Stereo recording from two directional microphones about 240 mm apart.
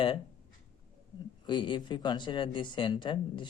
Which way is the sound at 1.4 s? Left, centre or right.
Centre.